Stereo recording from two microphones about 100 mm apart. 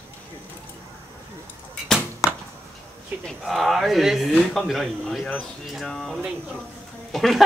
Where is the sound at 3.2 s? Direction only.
Centre (ahead or behind).